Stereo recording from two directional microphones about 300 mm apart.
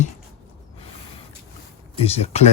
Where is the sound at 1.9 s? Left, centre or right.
Centre.